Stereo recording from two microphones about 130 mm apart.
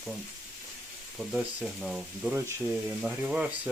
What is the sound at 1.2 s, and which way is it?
Speech, 10° right (ahead or behind).